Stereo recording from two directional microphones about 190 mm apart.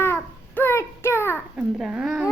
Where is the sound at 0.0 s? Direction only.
10° left (ahead or behind).